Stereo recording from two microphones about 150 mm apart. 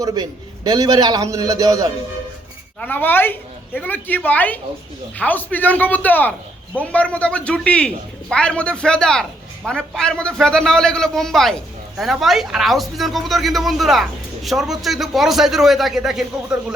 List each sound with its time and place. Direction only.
0.0 s a man's voice: 25° right (ahead or behind)
2.8 s speech: 15° left (ahead or behind); by 16.2 s 5° right (ahead or behind)